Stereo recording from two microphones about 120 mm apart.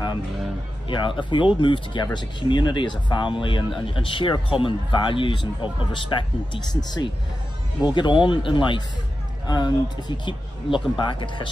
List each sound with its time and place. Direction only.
0.8 s speech: 45° left (ahead or behind)
6.7 s speech: 5° left (ahead or behind)
7.8 s a man's voice: 40° left (ahead or behind)